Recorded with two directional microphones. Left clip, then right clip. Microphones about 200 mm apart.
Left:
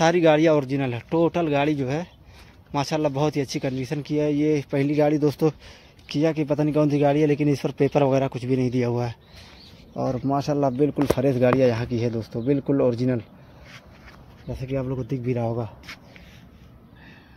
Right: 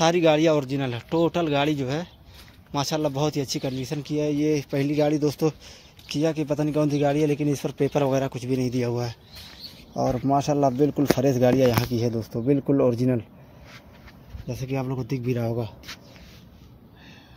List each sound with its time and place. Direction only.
0.0 s speech: 10° left (ahead or behind)
9.9 s speech: 5° right (ahead or behind)
14.5 s speech: 15° right (ahead or behind)